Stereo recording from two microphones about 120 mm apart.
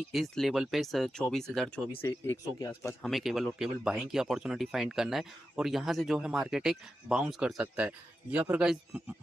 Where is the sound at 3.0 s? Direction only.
Centre (ahead or behind).